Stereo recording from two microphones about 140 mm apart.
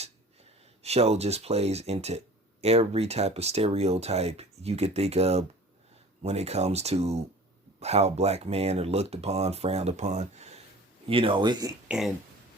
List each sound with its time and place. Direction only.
0.8 s speech: 50° right (ahead or behind)
11.1 s speech: 40° right (ahead or behind)
11.9 s speech: centre (ahead or behind)